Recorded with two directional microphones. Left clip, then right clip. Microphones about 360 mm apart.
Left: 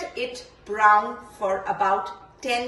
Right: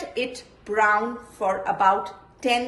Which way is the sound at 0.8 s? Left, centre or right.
Centre.